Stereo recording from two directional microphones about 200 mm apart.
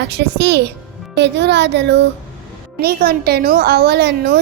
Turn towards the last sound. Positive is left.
turn(degrees=-55)  # may be behind; listen again after turning